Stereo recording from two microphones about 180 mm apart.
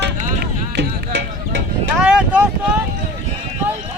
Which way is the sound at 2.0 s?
5° right (ahead or behind).